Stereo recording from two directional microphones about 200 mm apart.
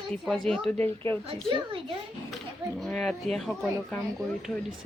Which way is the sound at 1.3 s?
25° right (ahead or behind).